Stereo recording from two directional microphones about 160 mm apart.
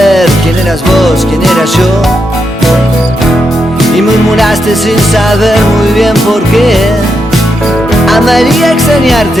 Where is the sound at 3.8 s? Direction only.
Centre (ahead or behind).